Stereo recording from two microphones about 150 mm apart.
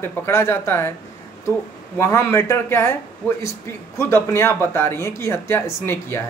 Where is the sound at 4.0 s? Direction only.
15° left (ahead or behind).